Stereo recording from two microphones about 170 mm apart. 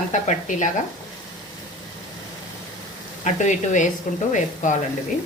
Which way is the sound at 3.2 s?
45° left (ahead or behind).